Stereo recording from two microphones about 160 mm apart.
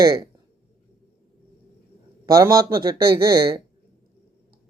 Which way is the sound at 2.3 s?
20° right (ahead or behind).